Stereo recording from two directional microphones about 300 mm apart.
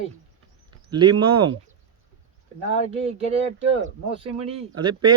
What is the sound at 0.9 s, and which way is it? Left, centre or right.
Speech, centre.